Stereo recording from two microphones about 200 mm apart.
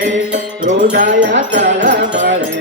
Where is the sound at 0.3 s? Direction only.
40° right (ahead or behind).